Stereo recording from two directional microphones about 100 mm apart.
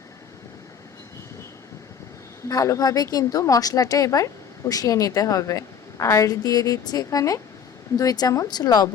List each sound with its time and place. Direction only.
2.5 s a woman's voice: 35° left (ahead or behind)